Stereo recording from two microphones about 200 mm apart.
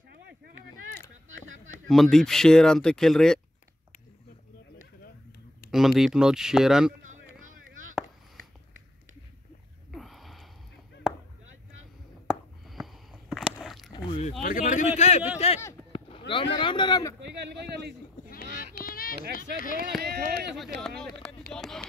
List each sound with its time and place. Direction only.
1.9 s speech: centre (ahead or behind)
5.7 s speech: centre (ahead or behind)
9.9 s sniff: centre (ahead or behind)
12.3 s a sound: centre (ahead or behind)
13.9 s a sound: 25° left (ahead or behind)
14.4 s a sound: 40° left (ahead or behind)
16.5 s speech: 25° left (ahead or behind)
18.3 s goat: 45° left (ahead or behind)
19.6 s speech: 45° left (ahead or behind)
20.0 s speech: 50° right (ahead or behind)
20.5 s speech: centre (ahead or behind)